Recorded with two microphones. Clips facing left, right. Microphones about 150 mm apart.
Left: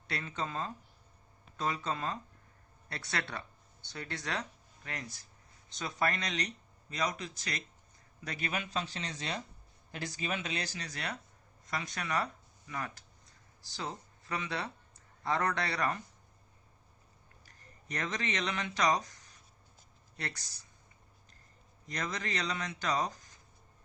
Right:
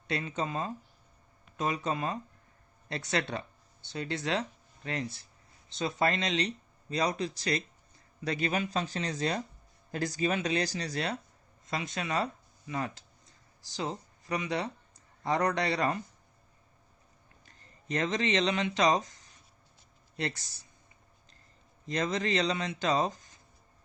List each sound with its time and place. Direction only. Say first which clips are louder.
0.1 s speech: right 5 dB; 20° right (ahead or behind)
17.4 s speech: right 5 dB; 25° right (ahead or behind)
21.8 s speech: right 8 dB; 25° right (ahead or behind)